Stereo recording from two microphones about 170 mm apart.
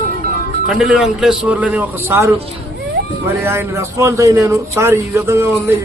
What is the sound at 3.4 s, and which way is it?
A man's voice, 15° right (ahead or behind).